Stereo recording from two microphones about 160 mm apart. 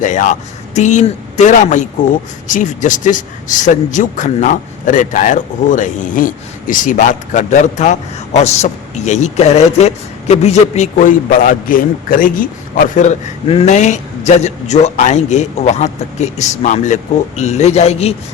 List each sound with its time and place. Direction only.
0.0 s a man's voice: 50° left (ahead or behind)